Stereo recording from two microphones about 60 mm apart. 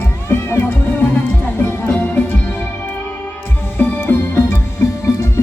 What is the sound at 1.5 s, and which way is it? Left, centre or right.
Music, left.